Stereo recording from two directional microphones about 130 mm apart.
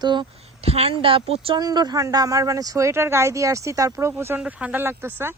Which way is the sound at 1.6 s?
30° right (ahead or behind).